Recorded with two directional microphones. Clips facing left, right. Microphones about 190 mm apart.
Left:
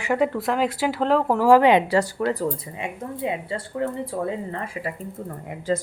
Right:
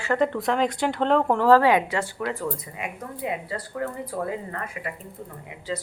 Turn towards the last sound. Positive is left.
turn(degrees=50)  # may be behind; listen again after turning